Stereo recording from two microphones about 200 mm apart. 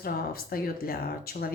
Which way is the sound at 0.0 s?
50° left (ahead or behind).